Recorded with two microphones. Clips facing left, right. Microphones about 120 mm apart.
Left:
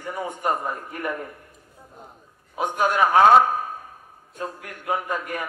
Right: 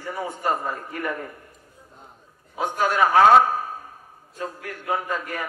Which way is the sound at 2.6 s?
15° left (ahead or behind).